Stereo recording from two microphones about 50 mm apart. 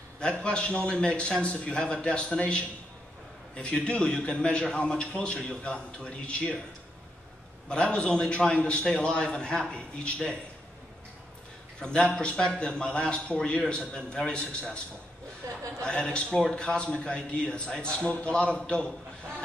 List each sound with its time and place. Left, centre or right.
0.2 s a man's voice: centre
7.6 s a man's voice: centre
11.8 s a man's voice: centre
15.8 s a man's voice: centre